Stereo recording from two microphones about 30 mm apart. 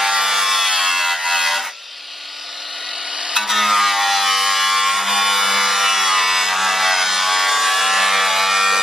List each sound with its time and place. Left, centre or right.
0.0 s a sound: centre
3.2 s music: right
3.4 s music: centre